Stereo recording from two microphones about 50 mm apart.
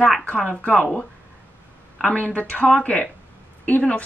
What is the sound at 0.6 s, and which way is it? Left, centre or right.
Speech, left.